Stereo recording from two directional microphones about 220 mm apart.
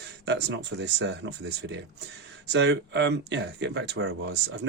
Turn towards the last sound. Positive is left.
turn(degrees=-50)  # may be behind; listen again after turning